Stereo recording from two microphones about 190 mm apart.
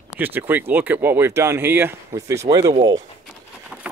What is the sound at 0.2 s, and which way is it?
Speech, 10° right (ahead or behind).